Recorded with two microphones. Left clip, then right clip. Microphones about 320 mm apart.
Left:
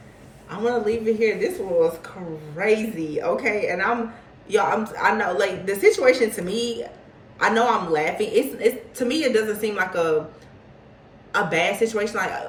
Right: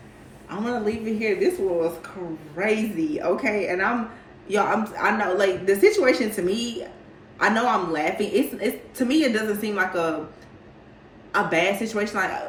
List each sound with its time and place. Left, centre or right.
0.4 s a woman's voice: right
11.3 s a woman's voice: right